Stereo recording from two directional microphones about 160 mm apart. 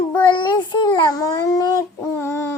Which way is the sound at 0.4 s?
25° left (ahead or behind).